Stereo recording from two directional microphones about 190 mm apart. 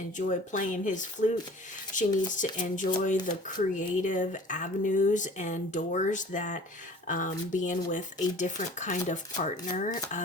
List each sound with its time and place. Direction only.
0.2 s speech: 40° left (ahead or behind)